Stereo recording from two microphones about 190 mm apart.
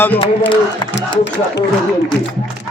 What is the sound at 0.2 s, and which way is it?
Speech, 25° left (ahead or behind).